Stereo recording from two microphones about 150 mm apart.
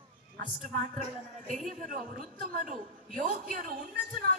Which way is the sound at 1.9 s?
60° right (ahead or behind).